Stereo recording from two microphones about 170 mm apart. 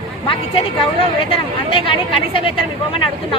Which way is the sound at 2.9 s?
30° left (ahead or behind).